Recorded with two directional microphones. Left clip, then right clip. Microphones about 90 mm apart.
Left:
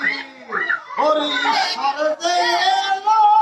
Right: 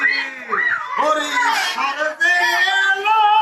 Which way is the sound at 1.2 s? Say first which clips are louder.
Right 1 dB; 30° left (ahead or behind).